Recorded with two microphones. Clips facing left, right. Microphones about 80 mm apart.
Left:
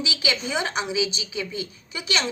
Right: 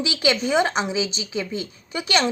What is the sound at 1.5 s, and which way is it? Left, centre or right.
Speech, right.